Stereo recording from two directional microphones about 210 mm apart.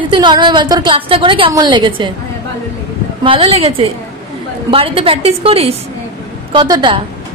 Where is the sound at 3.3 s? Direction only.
25° right (ahead or behind).